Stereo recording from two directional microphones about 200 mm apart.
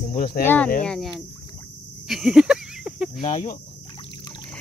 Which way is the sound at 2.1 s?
Centre (ahead or behind).